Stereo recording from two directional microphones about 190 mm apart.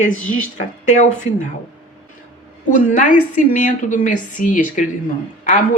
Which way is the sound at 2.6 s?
40° left (ahead or behind).